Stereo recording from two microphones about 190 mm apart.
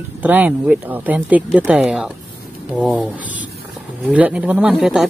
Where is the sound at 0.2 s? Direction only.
10° right (ahead or behind).